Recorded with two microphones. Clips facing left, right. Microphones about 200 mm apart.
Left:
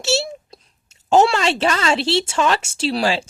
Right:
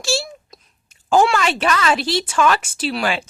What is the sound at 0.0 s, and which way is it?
A child's voice, 25° left (ahead or behind).